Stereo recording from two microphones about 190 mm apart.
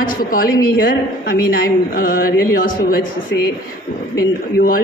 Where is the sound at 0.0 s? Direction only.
50° left (ahead or behind).